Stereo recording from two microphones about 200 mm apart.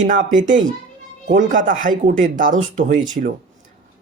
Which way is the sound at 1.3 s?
40° right (ahead or behind).